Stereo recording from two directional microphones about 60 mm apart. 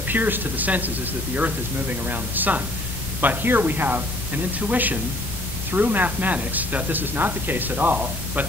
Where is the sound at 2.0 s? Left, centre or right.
Right.